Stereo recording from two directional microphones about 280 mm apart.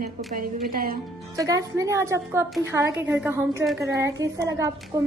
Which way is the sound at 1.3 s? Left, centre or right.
Centre.